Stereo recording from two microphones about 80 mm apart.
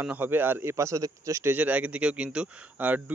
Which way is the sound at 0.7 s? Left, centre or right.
Right.